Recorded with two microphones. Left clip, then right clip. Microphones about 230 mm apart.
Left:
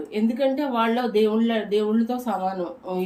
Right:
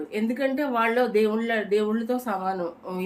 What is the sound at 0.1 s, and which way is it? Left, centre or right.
Speech, centre.